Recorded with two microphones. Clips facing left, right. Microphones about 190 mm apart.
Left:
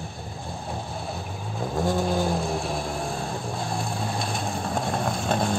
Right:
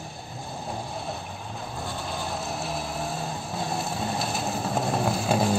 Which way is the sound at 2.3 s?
Centre (ahead or behind).